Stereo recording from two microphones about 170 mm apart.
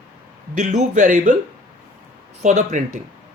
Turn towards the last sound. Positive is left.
turn(degrees=-45)  # may be behind; listen again after turning